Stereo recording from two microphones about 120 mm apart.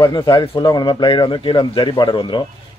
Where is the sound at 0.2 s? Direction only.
35° left (ahead or behind).